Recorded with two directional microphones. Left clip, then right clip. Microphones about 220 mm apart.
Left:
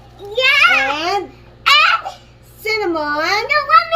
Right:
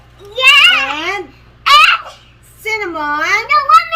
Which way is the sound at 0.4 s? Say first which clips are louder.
Right 4 dB; 10° right (ahead or behind).